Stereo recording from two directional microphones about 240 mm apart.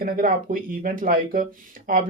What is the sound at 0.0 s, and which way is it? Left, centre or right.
Speech, right.